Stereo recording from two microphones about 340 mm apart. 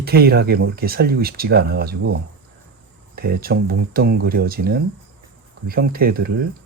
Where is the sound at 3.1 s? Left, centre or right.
Right.